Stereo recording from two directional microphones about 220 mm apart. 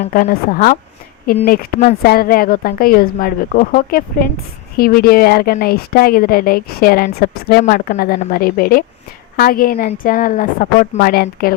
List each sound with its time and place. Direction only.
0.0 s a woman's voice: 40° left (ahead or behind)